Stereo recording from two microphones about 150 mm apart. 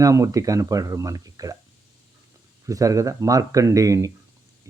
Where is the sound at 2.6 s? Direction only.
20° right (ahead or behind).